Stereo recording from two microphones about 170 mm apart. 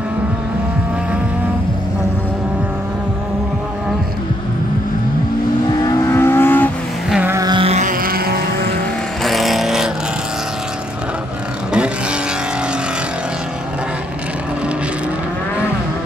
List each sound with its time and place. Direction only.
5.9 s vehicle: 15° left (ahead or behind)
7.1 s music: 10° right (ahead or behind)
7.3 s music: 25° right (ahead or behind)
7.7 s music: 50° right (ahead or behind)
9.2 s vehicle: centre (ahead or behind)